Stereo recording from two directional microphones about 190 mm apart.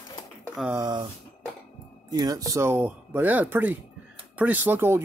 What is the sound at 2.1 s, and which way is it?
Speech, 20° right (ahead or behind).